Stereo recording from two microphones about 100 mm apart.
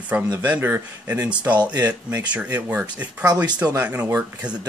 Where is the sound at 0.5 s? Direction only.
20° right (ahead or behind).